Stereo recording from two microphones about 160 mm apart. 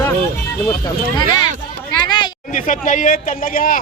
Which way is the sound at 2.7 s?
50° left (ahead or behind).